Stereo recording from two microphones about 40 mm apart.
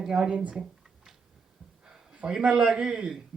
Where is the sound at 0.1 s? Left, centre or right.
Right.